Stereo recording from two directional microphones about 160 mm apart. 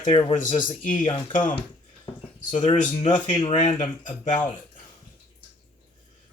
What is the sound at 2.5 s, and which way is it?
Speech, 30° left (ahead or behind).